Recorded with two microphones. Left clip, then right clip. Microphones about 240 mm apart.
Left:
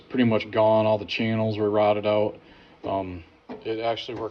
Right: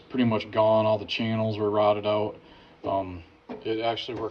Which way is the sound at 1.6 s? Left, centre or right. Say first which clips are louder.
Left 1 dB; right.